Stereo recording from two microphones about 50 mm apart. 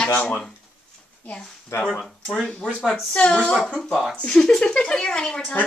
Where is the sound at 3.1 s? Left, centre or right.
Left.